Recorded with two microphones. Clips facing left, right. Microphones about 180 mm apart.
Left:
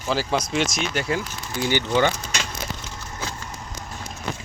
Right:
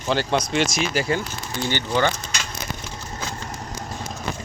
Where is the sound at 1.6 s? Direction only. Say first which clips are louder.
Left 2 dB; 15° left (ahead or behind).